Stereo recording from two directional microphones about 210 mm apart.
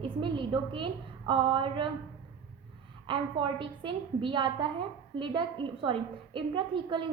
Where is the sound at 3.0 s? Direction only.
25° right (ahead or behind).